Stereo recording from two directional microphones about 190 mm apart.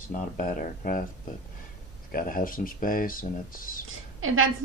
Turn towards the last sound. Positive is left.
turn(degrees=-90)